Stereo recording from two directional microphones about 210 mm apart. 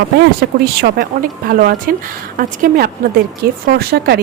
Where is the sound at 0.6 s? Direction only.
45° right (ahead or behind).